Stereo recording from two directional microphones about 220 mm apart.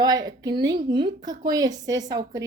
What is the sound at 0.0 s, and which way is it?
A woman's voice, 20° right (ahead or behind).